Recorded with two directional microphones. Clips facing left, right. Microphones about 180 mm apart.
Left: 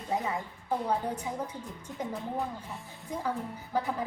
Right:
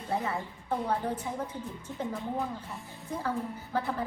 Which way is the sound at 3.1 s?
15° left (ahead or behind).